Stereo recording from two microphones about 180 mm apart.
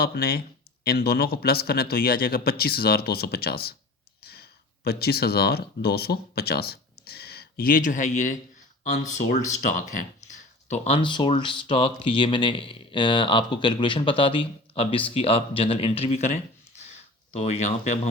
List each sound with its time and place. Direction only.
0.0 s speech: 60° left (ahead or behind)
10.7 s speech: 35° left (ahead or behind)